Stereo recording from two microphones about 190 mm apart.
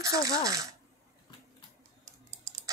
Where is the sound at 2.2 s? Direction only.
40° right (ahead or behind).